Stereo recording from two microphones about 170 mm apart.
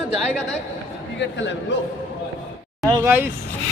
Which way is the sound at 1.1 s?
90° left.